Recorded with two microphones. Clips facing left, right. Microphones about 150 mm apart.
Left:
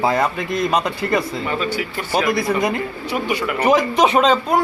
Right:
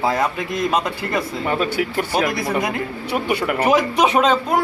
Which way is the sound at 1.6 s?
60° right (ahead or behind).